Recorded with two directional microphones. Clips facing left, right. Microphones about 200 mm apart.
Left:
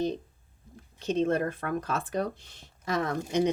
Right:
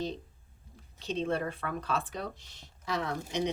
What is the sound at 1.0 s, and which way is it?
A woman's voice, 45° left (ahead or behind).